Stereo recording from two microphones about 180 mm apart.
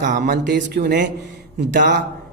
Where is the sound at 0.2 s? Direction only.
55° right (ahead or behind).